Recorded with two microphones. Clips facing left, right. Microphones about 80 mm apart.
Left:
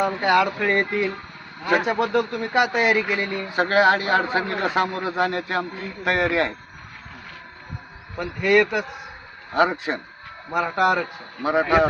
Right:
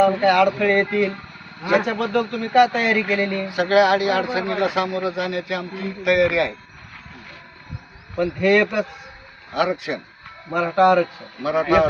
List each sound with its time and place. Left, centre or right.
0.0 s speech: left
8.2 s speech: centre
9.6 s speech: left
10.5 s speech: centre
11.4 s speech: left